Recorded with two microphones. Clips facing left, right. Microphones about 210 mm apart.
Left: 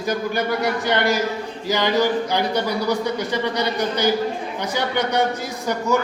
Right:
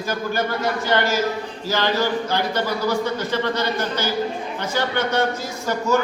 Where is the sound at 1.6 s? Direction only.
15° left (ahead or behind).